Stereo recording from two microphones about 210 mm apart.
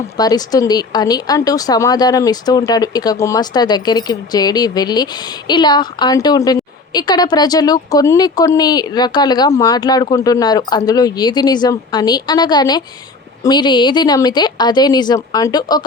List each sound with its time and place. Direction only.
0.2 s a woman's voice: 15° left (ahead or behind)